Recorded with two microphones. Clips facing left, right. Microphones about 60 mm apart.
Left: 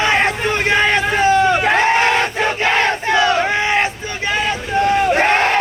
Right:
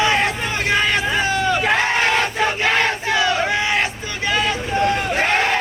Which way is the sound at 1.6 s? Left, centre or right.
Left.